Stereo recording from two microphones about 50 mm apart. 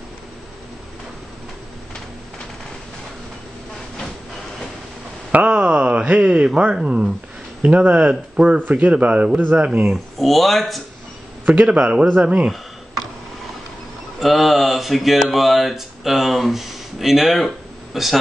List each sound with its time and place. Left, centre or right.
5.3 s speech: right
8.5 s speech: right
10.1 s speech: centre
11.4 s a man's voice: right
11.8 s a man's voice: centre
14.2 s speech: centre